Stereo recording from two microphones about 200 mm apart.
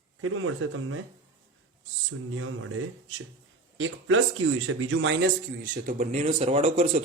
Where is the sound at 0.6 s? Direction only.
90° right.